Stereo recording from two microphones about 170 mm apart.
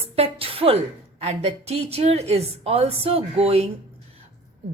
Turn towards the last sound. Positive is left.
turn(degrees=-35)  # may be behind; listen again after turning